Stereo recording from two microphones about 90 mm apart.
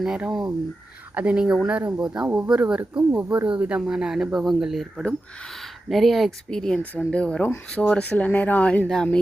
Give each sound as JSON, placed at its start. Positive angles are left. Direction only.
{"t": 0.0, "sound": "speech", "side_deg": -5}
{"t": 3.1, "sound": "speech", "side_deg": -25}